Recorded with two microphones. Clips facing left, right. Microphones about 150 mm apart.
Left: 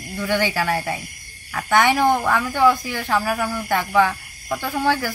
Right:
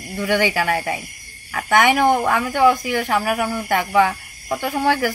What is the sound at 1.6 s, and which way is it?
Speech, 15° right (ahead or behind).